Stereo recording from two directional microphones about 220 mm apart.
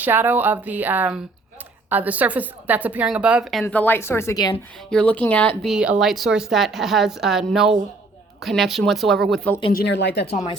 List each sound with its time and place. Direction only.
0.0 s a woman's voice: 10° right (ahead or behind)
9.7 s speech: 50° left (ahead or behind)
10.3 s speech: 25° left (ahead or behind)